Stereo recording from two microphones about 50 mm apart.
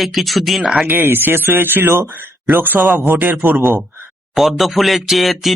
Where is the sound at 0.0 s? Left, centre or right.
Centre.